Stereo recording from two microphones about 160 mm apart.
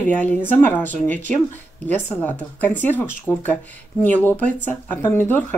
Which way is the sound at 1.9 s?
10° left (ahead or behind).